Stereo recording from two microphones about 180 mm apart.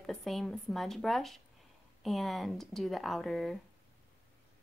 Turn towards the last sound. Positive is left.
turn(degrees=0)  # may be behind; listen again after turning